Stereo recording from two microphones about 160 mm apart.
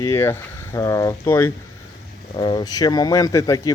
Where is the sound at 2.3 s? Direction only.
30° left (ahead or behind).